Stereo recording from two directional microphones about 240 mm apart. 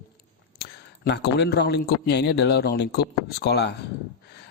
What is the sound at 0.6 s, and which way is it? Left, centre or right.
Speech, left.